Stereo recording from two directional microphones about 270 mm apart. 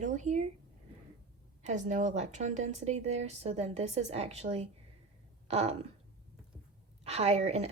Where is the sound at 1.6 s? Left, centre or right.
Right.